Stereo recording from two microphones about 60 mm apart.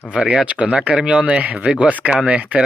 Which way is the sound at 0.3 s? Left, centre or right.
Centre.